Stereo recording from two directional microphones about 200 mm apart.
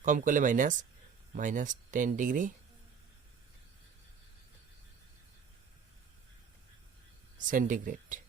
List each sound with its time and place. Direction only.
0.0 s speech: 40° right (ahead or behind)
7.3 s speech: 40° right (ahead or behind)